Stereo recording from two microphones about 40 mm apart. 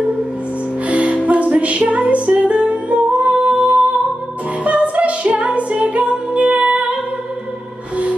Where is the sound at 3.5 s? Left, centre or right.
Right.